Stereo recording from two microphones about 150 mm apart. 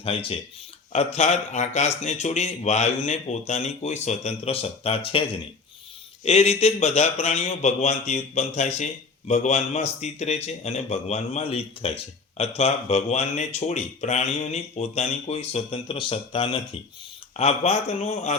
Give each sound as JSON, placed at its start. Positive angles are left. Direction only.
{"t": 0.0, "sound": "a man's voice", "side_deg": 40}
{"t": 6.2, "sound": "a man's voice", "side_deg": 45}
{"t": 17.3, "sound": "a man's voice", "side_deg": 50}